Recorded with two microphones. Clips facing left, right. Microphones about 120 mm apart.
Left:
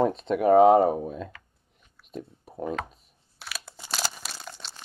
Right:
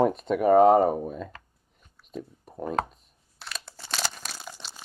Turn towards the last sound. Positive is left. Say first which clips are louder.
# even
turn(degrees=-5)  # may be behind; listen again after turning